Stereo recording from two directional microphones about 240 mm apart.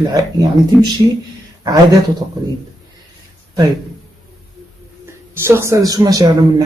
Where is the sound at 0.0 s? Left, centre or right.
Centre.